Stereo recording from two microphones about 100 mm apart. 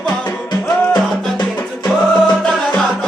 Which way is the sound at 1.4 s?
45° left (ahead or behind).